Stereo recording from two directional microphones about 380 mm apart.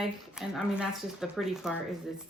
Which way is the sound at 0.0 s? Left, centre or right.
Centre.